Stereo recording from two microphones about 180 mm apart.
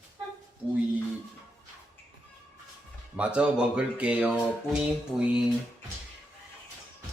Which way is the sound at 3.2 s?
5° right (ahead or behind).